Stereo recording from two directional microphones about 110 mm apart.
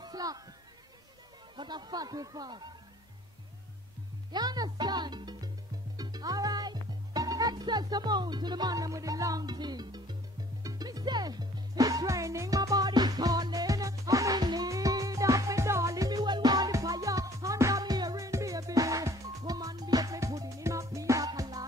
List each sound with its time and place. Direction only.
0.0 s a sound: 35° right (ahead or behind)
1.6 s speech: 40° right (ahead or behind)
4.3 s speech: 40° right (ahead or behind)
5.9 s music: 35° right (ahead or behind)